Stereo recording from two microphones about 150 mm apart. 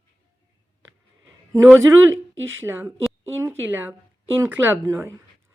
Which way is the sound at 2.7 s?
15° right (ahead or behind).